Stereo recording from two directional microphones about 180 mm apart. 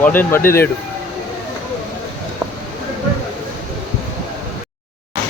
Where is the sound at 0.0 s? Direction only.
10° left (ahead or behind).